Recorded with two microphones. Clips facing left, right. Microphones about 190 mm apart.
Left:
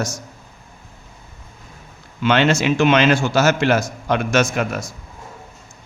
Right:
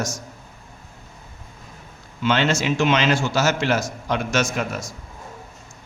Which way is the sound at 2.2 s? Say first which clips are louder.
Left 4 dB; 65° left (ahead or behind).